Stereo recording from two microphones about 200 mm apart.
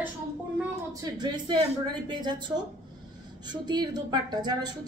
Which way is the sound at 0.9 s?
20° right (ahead or behind).